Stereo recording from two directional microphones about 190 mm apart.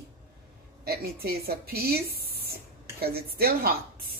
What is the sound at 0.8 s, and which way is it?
Speech, 55° right (ahead or behind).